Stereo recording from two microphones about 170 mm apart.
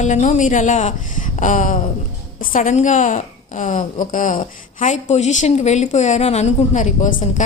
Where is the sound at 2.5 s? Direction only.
45° left (ahead or behind).